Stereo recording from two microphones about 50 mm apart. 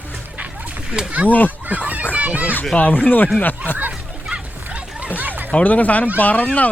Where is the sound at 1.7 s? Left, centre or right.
Right.